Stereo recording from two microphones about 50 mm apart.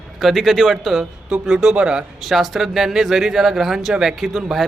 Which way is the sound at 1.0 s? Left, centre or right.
Centre.